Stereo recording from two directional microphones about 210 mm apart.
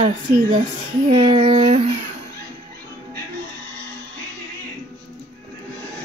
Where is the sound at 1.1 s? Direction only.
25° right (ahead or behind).